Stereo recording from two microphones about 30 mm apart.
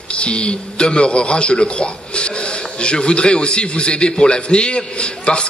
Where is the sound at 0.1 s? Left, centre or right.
Left.